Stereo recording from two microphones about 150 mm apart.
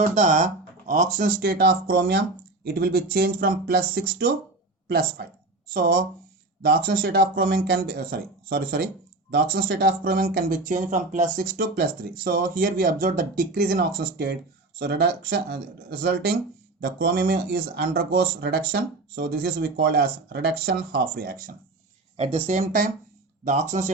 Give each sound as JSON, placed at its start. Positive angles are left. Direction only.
{"t": 0.0, "sound": "speech", "side_deg": -55}
{"t": 1.4, "sound": "speech", "side_deg": -85}
{"t": 5.7, "sound": "speech", "side_deg": -70}
{"t": 22.2, "sound": "speech", "side_deg": -40}